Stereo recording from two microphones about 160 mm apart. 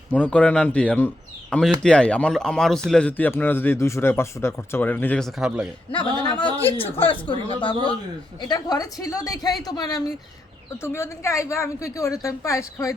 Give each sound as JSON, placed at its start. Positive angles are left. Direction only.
{"t": 0.1, "sound": "speech", "side_deg": 10}
{"t": 5.4, "sound": "a man's voice", "side_deg": -5}
{"t": 5.9, "sound": "a woman's voice", "side_deg": 30}